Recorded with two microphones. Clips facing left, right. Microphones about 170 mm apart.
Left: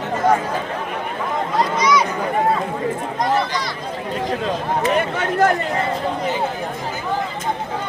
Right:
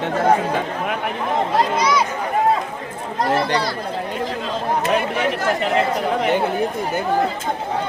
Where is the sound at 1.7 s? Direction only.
30° right (ahead or behind).